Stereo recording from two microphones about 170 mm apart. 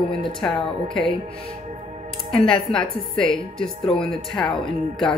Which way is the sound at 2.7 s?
5° left (ahead or behind).